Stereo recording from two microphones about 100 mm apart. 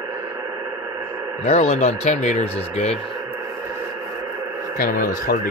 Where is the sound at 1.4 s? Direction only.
90° left.